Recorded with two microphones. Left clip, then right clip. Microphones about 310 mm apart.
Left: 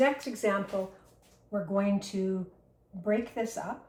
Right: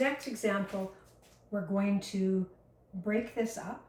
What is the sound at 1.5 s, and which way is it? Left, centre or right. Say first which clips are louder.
Speech: left 4 dB; centre.